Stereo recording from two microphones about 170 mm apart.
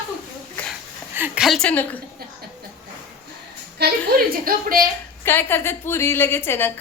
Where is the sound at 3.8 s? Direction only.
70° right (ahead or behind).